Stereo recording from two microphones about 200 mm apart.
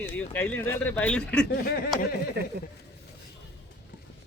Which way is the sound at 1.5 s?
50° left (ahead or behind).